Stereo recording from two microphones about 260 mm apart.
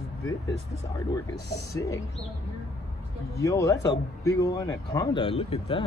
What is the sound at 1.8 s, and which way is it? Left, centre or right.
Speech, centre.